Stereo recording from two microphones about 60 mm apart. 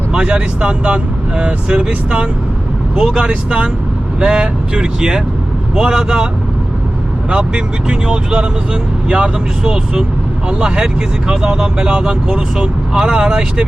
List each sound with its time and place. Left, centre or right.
0.1 s speech: centre
7.3 s speech: centre
11.3 s speech: centre